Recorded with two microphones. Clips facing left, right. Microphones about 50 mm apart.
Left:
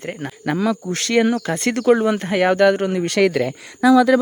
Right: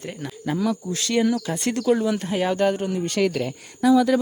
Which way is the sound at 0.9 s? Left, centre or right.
Left.